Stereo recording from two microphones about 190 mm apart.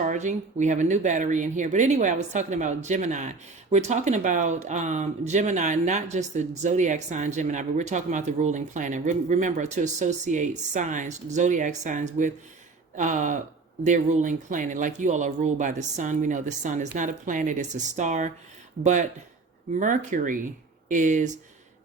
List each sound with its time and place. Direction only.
0.0 s speech: 40° right (ahead or behind)